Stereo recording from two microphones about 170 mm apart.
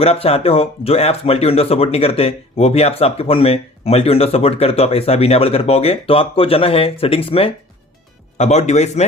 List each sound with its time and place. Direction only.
0.0 s speech: 35° left (ahead or behind)